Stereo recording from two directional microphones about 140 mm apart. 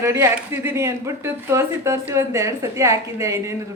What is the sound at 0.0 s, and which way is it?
A man's voice, 20° right (ahead or behind).